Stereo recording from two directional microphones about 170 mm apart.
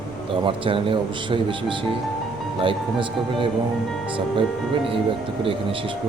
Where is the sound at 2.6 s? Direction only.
30° right (ahead or behind).